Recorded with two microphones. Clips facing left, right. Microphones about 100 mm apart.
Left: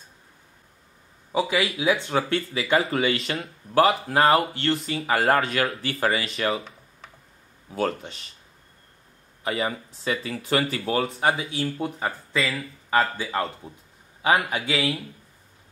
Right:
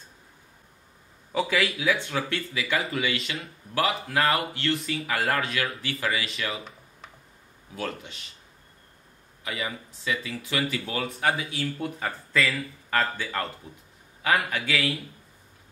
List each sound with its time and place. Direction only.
1.3 s speech: 15° left (ahead or behind); by 6.6 s 35° left (ahead or behind)
7.7 s speech: 40° left (ahead or behind)
9.4 s speech: 40° left (ahead or behind)
12.5 s a man's voice: 15° left (ahead or behind)